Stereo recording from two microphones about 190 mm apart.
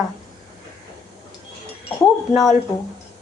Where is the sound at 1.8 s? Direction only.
Centre (ahead or behind).